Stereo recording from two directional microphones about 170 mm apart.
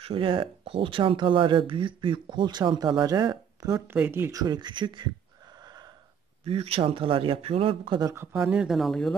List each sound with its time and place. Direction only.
0.0 s speech: 30° right (ahead or behind)
6.4 s speech: 35° right (ahead or behind)
8.1 s speech: 15° right (ahead or behind); by 9.1 s centre (ahead or behind)